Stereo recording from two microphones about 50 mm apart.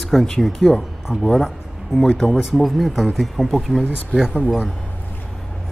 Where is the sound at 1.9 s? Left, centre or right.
Centre.